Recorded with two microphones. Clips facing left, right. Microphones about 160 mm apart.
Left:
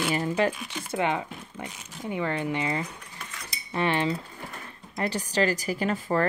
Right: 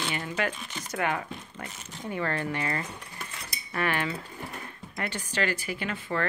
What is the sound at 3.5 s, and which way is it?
Cutlery, 25° left (ahead or behind).